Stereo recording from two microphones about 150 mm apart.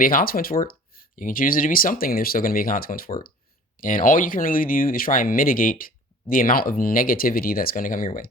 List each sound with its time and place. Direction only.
0.0 s speech: 70° left (ahead or behind)